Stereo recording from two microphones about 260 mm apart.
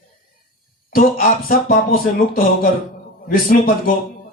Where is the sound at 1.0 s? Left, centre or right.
Left.